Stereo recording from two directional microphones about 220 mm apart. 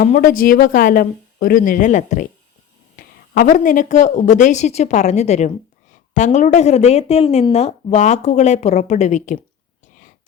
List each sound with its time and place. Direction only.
0.0 s a woman's voice: 40° left (ahead or behind)